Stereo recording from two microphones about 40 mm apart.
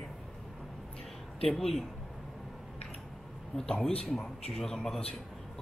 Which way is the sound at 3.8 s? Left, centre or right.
Centre.